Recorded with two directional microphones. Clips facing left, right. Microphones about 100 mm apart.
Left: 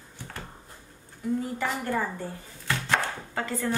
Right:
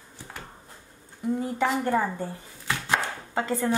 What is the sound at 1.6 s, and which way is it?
Speech, 20° right (ahead or behind).